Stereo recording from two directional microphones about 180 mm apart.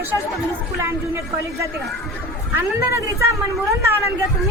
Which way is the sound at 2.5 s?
15° right (ahead or behind).